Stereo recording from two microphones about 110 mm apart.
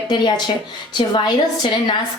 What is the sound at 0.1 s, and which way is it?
Speech, 45° left (ahead or behind).